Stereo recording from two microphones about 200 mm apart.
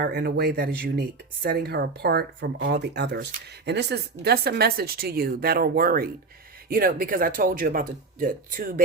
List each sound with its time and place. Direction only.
0.0 s speech: 50° right (ahead or behind)